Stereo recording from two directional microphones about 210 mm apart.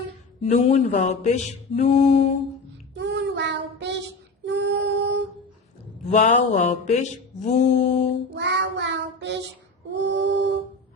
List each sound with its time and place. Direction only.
0.5 s mantra: 35° left (ahead or behind)
2.9 s child singing: 55° right (ahead or behind)
4.4 s a sound: 55° right (ahead or behind)
6.1 s mantra: 35° left (ahead or behind)
8.4 s child singing: 55° right (ahead or behind)
10.0 s a sound: 55° right (ahead or behind)